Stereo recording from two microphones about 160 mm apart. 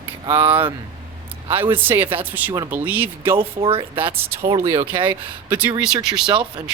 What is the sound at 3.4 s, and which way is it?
Speech, 35° right (ahead or behind).